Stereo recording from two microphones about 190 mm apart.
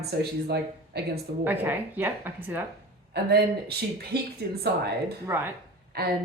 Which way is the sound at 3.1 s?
60° right (ahead or behind).